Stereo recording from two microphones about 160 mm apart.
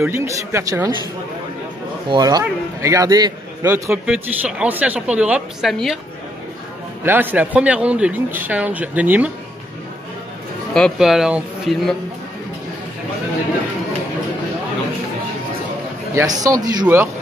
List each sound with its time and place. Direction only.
0.0 s a man's voice: 15° right (ahead or behind)
2.0 s a man's voice: 25° right (ahead or behind); by 5.9 s centre (ahead or behind)
7.1 s a man's voice: 10° right (ahead or behind)
10.7 s speech: centre (ahead or behind)
16.2 s a man's voice: 20° right (ahead or behind)